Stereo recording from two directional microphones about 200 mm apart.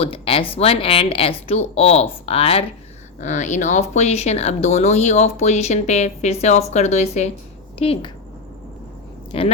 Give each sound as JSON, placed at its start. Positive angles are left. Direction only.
{"t": 0.0, "sound": "speech", "side_deg": 25}
{"t": 9.3, "sound": "speech", "side_deg": 30}